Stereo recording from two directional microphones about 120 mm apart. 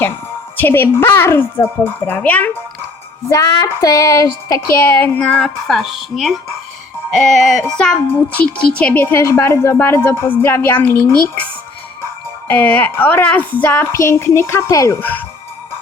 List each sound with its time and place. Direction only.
0.5 s speech: 15° left (ahead or behind)
3.2 s speech: 25° left (ahead or behind)
5.2 s speech: 5° left (ahead or behind)
8.0 s speech: 15° left (ahead or behind)
12.5 s speech: 15° left (ahead or behind)